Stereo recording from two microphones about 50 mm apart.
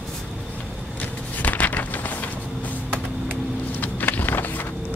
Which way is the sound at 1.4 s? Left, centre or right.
Left.